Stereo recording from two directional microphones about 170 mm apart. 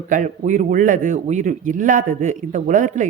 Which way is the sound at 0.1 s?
50° right (ahead or behind).